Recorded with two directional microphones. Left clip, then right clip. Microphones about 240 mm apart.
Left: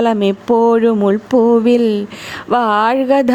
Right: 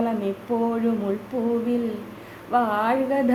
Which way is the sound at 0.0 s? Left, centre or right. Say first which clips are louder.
Left 12 dB; left.